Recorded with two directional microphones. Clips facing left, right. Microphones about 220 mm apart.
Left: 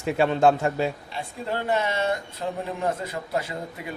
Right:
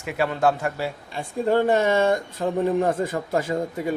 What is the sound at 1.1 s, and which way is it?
Speech, 45° right (ahead or behind).